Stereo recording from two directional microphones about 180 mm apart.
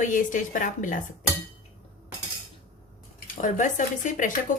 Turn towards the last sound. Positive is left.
turn(degrees=45)  # may be behind; listen again after turning